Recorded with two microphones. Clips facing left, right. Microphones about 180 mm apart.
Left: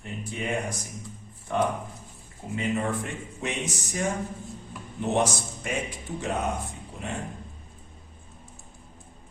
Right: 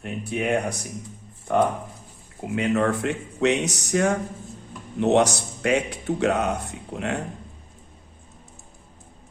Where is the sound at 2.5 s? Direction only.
75° right (ahead or behind).